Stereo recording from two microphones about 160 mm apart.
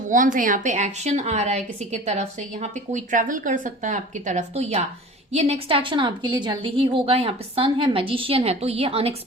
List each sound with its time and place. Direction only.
0.1 s a woman's voice: 55° right (ahead or behind); by 9.1 s 40° right (ahead or behind)